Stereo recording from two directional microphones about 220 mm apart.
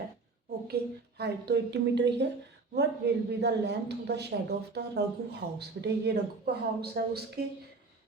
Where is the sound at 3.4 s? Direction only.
50° right (ahead or behind).